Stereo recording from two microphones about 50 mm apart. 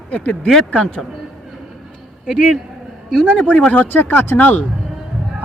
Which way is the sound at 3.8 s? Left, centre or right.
Left.